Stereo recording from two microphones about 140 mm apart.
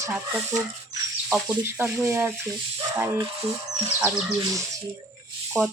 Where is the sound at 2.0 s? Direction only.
15° right (ahead or behind).